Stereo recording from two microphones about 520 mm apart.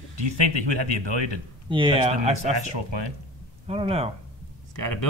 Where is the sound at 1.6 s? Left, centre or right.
Centre.